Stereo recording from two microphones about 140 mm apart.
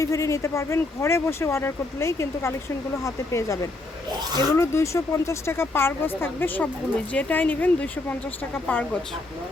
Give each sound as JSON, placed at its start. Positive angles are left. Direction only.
{"t": 0.0, "sound": "speech", "side_deg": 20}